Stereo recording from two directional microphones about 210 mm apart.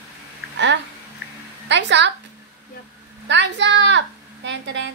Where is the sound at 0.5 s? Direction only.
60° right (ahead or behind).